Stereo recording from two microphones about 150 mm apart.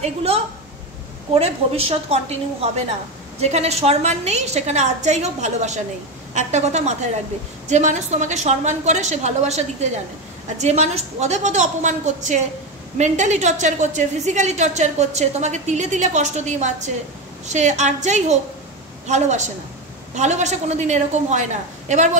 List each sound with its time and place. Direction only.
0.0 s a woman's voice: 45° right (ahead or behind)
1.4 s a woman's voice: 40° right (ahead or behind)